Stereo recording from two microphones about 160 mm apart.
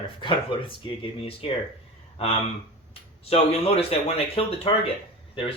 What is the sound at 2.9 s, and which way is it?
A man's voice, 40° left (ahead or behind).